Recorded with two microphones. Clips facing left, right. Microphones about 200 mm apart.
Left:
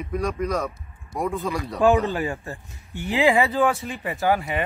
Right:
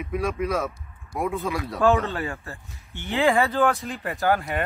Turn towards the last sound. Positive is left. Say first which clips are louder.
# left 1 dB
turn(degrees=0)  # may be behind; listen again after turning